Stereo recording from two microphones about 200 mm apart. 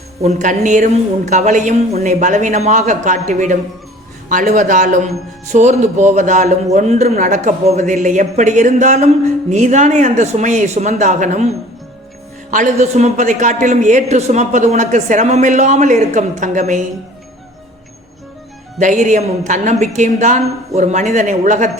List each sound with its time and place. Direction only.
0.2 s a man's voice: 35° right (ahead or behind)
18.8 s a man's voice: 40° right (ahead or behind)